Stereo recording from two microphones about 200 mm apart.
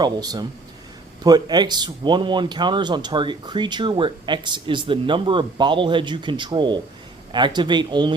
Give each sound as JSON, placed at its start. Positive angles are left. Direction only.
{"t": 0.0, "sound": "speech", "side_deg": -20}